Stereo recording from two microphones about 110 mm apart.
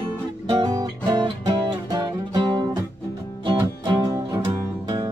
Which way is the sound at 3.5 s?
40° right (ahead or behind).